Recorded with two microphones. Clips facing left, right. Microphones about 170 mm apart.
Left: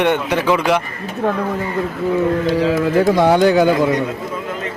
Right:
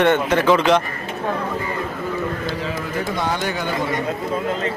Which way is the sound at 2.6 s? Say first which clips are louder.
Left 11 dB; 90° left.